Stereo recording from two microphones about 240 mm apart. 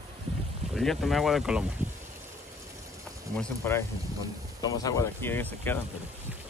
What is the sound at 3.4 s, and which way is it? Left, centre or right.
Speech, centre.